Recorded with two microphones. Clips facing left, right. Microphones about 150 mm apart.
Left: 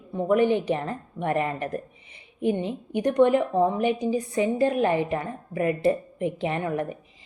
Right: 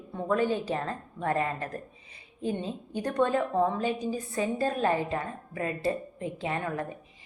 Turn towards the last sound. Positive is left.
turn(degrees=20)  # may be behind; listen again after turning